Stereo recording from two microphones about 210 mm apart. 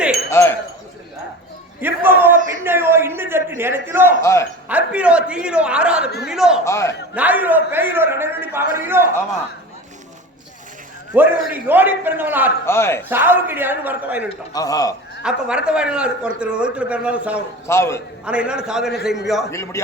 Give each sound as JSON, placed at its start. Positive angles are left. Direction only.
{"t": 0.3, "sound": "wind chime", "side_deg": 15}
{"t": 1.8, "sound": "a sound", "side_deg": -10}
{"t": 4.2, "sound": "a man's voice", "side_deg": 15}
{"t": 4.7, "sound": "a man's voice", "side_deg": -5}
{"t": 6.7, "sound": "a man's voice", "side_deg": 15}
{"t": 7.1, "sound": "a man's voice", "side_deg": -5}
{"t": 11.1, "sound": "a man's voice", "side_deg": -10}
{"t": 12.6, "sound": "a man's voice", "side_deg": 10}
{"t": 13.1, "sound": "a man's voice", "side_deg": -10}
{"t": 14.5, "sound": "a man's voice", "side_deg": 15}
{"t": 15.2, "sound": "a man's voice", "side_deg": -5}
{"t": 17.7, "sound": "a man's voice", "side_deg": 10}
{"t": 18.3, "sound": "a man's voice", "side_deg": -5}
{"t": 19.5, "sound": "a man's voice", "side_deg": 15}